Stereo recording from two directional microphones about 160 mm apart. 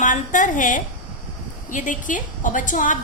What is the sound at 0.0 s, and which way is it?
A woman's voice, 55° left (ahead or behind).